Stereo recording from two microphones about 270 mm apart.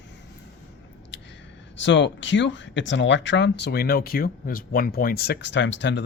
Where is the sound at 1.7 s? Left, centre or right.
Left.